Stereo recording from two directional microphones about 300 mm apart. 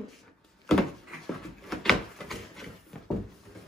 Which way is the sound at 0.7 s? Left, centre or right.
Centre.